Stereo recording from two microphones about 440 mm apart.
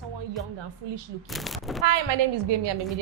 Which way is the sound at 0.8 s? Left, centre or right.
Right.